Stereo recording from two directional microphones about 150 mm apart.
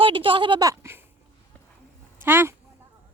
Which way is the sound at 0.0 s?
35° right (ahead or behind).